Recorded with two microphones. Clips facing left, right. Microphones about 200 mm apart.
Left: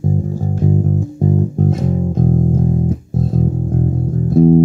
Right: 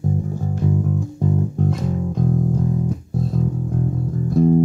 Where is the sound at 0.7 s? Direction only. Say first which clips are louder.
Left 4 dB; 40° left (ahead or behind).